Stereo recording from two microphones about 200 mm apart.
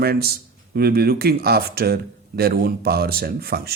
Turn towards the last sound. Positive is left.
turn(degrees=-50)  # may be behind; listen again after turning